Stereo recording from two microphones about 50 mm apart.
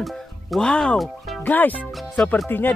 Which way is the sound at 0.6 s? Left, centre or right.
Centre.